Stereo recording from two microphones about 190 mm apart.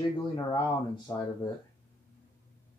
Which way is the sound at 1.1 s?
15° left (ahead or behind).